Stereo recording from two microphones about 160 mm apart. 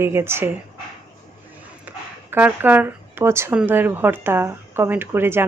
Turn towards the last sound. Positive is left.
turn(degrees=-15)  # may be behind; listen again after turning